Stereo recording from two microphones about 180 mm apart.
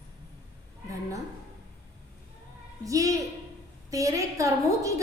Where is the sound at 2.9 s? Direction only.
20° right (ahead or behind).